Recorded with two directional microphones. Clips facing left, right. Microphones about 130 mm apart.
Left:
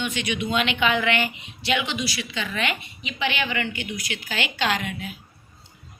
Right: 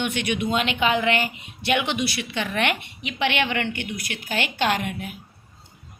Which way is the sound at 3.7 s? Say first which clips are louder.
Even; 55° right (ahead or behind).